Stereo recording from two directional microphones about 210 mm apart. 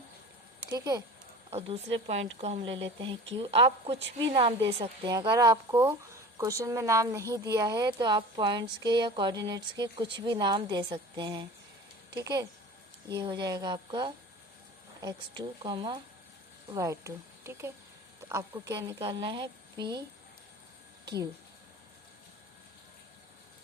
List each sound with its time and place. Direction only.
0.7 s speech: 15° right (ahead or behind)
1.5 s a woman's voice: 30° right (ahead or behind)